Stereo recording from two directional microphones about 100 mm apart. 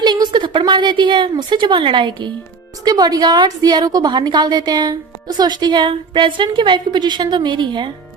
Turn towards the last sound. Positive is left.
turn(degrees=-50)  # may be behind; listen again after turning